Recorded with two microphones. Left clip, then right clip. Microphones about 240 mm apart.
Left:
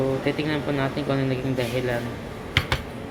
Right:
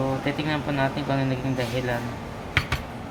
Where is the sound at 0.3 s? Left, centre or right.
Centre.